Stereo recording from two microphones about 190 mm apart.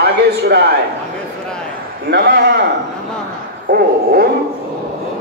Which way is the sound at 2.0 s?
60° right (ahead or behind).